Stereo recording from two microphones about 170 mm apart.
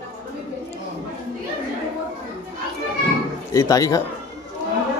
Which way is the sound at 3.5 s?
20° left (ahead or behind).